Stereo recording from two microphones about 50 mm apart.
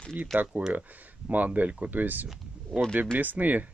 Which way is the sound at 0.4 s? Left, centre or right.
Right.